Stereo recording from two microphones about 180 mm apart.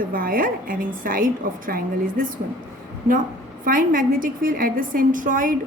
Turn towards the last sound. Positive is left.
turn(degrees=-50)  # may be behind; listen again after turning